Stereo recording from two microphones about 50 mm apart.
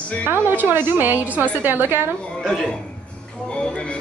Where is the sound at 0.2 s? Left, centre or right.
Right.